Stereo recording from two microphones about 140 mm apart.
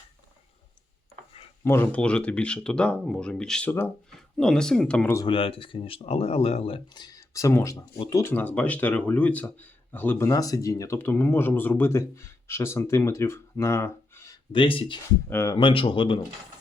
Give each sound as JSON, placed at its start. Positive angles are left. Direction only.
{"t": 1.6, "sound": "speech", "side_deg": 15}
{"t": 3.7, "sound": "speech", "side_deg": 15}
{"t": 4.4, "sound": "speech", "side_deg": 5}
{"t": 5.2, "sound": "speech", "side_deg": 40}
{"t": 14.5, "sound": "speech", "side_deg": 40}
{"t": 15.3, "sound": "speech", "side_deg": 20}
{"t": 15.5, "sound": "speech", "side_deg": 40}